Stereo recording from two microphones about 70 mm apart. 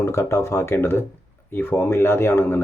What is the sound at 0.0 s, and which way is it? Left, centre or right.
Speech, left.